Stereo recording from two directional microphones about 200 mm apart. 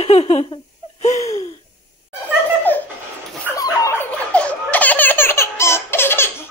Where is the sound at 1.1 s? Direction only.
15° left (ahead or behind).